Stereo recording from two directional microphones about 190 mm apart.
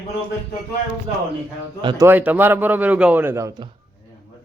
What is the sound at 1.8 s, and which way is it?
Speech, 25° right (ahead or behind).